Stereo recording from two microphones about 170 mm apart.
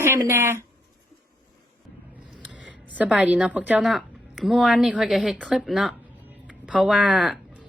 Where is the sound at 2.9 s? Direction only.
10° right (ahead or behind).